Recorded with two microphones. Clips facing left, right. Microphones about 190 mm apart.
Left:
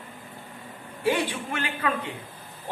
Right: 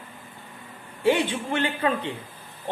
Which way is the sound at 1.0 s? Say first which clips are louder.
Right 3 dB; 30° right (ahead or behind).